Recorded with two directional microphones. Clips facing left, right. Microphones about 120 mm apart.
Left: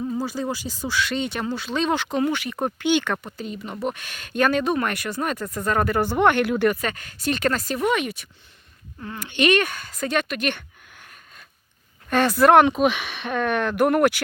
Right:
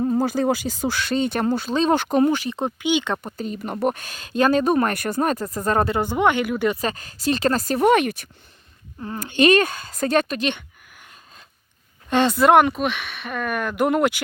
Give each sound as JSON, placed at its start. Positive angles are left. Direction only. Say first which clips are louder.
{"t": 0.0, "sound": "speech", "louder": "right 6 dB", "side_deg": -50}
{"t": 2.0, "sound": "speech", "louder": "right 5 dB", "side_deg": -50}
{"t": 2.2, "sound": "speech", "louder": "right 4 dB", "side_deg": -35}
{"t": 2.7, "sound": "speech", "louder": "left 2 dB", "side_deg": -15}
{"t": 3.3, "sound": "speech", "louder": "right 4 dB", "side_deg": -45}
{"t": 6.0, "sound": "speech", "louder": "left 1 dB", "side_deg": -15}
{"t": 6.7, "sound": "speech", "louder": "even", "side_deg": -30}
{"t": 9.1, "sound": "speech", "louder": "right 4 dB", "side_deg": -40}
{"t": 12.0, "sound": "speech", "louder": "even", "side_deg": -20}
{"t": 12.6, "sound": "speech", "louder": "left 3 dB", "side_deg": 0}